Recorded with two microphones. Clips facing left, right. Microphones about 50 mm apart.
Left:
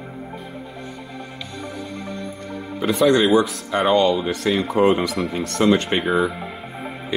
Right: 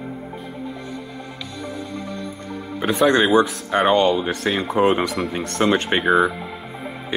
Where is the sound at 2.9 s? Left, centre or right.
Right.